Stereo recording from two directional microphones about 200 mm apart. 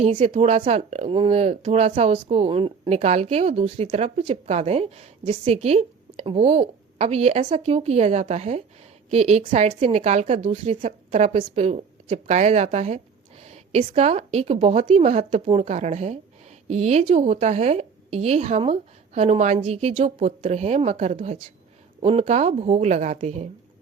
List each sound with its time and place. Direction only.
0.0 s speech: 30° right (ahead or behind)